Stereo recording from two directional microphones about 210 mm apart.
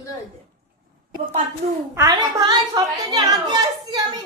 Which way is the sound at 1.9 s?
15° right (ahead or behind).